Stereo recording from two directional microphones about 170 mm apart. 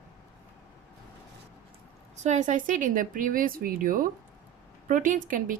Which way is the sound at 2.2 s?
45° right (ahead or behind).